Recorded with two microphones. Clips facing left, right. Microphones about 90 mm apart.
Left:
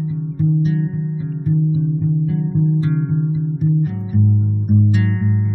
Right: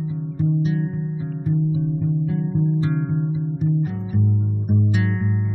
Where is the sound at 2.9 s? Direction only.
10° right (ahead or behind).